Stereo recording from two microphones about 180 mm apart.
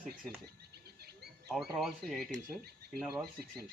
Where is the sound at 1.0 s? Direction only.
65° right (ahead or behind).